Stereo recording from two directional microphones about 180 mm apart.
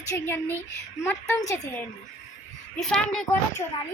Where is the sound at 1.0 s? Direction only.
15° left (ahead or behind).